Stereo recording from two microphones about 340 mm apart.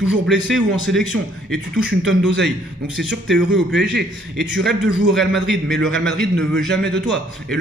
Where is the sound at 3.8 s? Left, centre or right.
Right.